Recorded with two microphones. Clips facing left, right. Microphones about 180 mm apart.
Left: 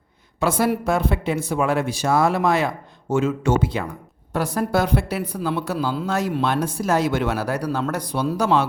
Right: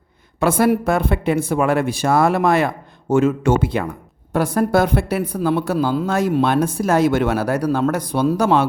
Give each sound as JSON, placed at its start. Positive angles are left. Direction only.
{"t": 0.3, "sound": "a woman's voice", "side_deg": -55}